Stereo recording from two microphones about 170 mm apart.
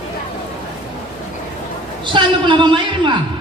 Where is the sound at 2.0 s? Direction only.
25° right (ahead or behind).